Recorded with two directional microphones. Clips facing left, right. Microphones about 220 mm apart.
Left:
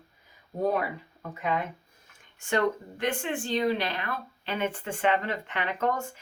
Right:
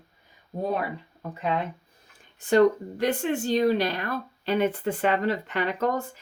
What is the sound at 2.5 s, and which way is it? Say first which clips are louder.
Speech: right 8 dB; 40° right (ahead or behind).